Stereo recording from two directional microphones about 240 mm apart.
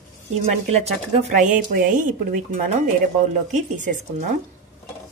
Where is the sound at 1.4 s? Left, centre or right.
Right.